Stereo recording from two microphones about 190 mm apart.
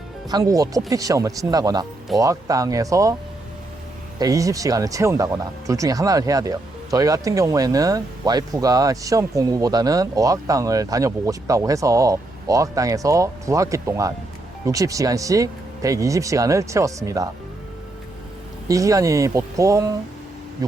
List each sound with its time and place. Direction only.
0.3 s speech: 20° right (ahead or behind)
4.2 s speech: 15° right (ahead or behind)
18.7 s speech: 15° right (ahead or behind)